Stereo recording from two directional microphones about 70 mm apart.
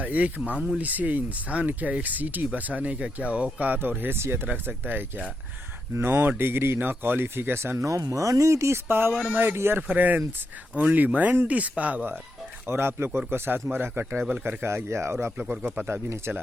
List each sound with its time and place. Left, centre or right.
0.0 s speech: right
9.9 s speech: right
12.6 s speech: right
16.0 s speech: right